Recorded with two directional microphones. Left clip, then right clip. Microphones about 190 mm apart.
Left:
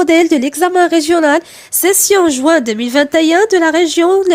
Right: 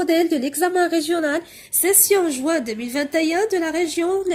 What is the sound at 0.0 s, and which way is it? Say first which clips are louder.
Speech: left 9 dB; 45° left (ahead or behind).